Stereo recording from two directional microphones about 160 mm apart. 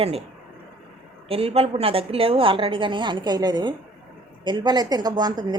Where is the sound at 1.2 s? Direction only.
35° right (ahead or behind).